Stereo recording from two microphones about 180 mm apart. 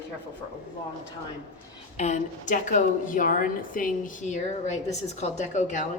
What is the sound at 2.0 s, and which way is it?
A woman's voice, 40° left (ahead or behind).